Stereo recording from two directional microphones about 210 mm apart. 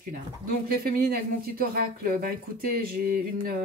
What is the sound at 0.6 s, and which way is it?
Speech, 45° right (ahead or behind).